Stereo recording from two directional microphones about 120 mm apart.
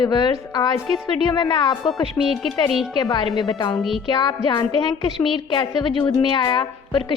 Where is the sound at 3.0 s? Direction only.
40° left (ahead or behind).